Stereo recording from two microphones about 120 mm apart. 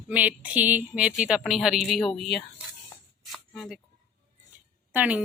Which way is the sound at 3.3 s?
Centre (ahead or behind).